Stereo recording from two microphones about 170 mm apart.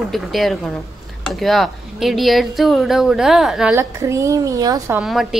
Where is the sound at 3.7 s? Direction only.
15° right (ahead or behind).